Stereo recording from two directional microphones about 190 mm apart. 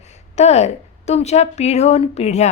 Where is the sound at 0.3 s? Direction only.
35° left (ahead or behind).